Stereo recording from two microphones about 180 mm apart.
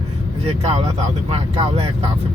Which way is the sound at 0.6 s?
35° right (ahead or behind).